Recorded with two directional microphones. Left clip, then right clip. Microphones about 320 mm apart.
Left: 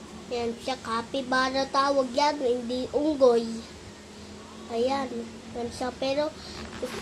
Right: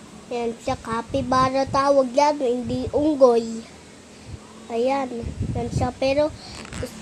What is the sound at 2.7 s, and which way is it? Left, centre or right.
Speech, centre.